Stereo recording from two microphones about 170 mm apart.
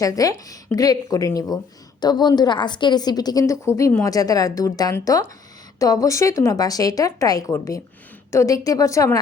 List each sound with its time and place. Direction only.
0.0 s a woman's voice: 20° left (ahead or behind)